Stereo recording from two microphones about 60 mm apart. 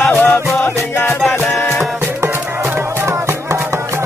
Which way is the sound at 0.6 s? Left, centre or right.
Left.